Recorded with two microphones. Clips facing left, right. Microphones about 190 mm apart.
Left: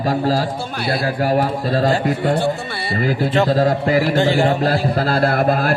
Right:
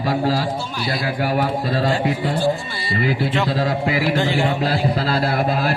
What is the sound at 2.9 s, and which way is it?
A man's voice, 45° left (ahead or behind).